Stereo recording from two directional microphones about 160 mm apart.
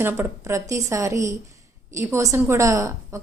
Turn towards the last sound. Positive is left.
turn(degrees=-20)  # may be behind; listen again after turning